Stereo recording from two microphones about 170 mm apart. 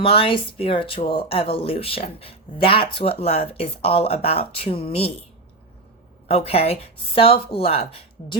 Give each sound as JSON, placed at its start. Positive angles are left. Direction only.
{"t": 0.0, "sound": "speech", "side_deg": 35}
{"t": 6.2, "sound": "speech", "side_deg": 35}